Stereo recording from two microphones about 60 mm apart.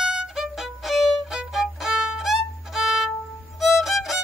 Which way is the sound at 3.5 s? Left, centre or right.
Centre.